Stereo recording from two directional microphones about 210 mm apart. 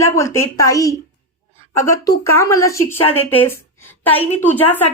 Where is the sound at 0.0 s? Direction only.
15° left (ahead or behind).